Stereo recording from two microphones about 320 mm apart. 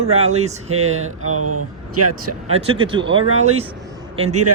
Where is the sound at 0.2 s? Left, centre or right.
Right.